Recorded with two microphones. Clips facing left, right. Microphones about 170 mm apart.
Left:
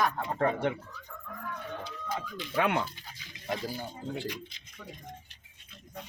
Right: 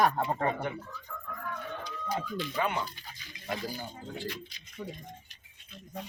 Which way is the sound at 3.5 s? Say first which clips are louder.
Left 1 dB; 25° left (ahead or behind).